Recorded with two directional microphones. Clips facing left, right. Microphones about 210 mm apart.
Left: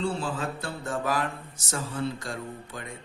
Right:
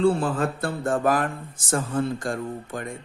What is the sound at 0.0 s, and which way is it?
A man's voice, 55° right (ahead or behind).